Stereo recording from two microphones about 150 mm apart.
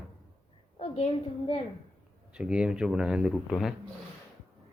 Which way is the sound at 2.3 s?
5° right (ahead or behind).